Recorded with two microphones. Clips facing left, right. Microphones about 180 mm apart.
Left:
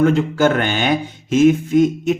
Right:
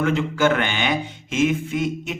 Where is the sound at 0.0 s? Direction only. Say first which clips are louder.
Left 5 dB; 40° left (ahead or behind).